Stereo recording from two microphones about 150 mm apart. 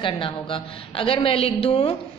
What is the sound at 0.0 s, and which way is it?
A woman's voice, 35° left (ahead or behind).